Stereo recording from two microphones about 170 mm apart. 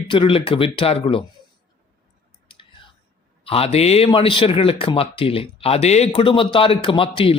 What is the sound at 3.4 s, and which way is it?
A man's voice, 35° left (ahead or behind).